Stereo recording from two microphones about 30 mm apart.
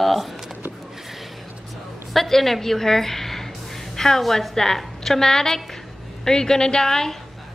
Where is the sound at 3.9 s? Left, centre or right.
Centre.